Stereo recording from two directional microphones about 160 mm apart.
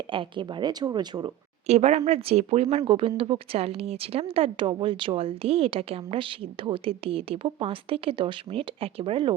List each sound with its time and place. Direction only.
0.1 s speech: 30° right (ahead or behind)
1.6 s speech: 40° right (ahead or behind)